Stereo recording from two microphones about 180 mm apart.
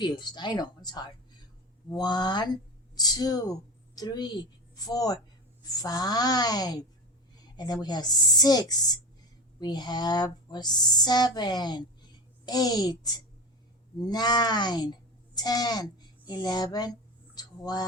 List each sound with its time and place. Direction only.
0.0 s a woman's voice: 25° left (ahead or behind)